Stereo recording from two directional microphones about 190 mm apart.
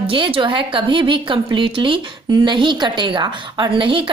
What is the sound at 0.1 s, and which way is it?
A woman's voice, 25° right (ahead or behind).